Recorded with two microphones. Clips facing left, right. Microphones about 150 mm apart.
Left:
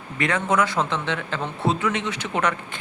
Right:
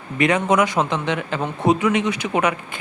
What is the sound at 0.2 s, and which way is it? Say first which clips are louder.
A man's voice: right 4 dB; 15° right (ahead or behind).